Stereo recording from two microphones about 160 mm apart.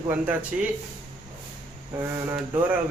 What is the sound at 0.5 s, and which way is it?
Speech, 5° right (ahead or behind).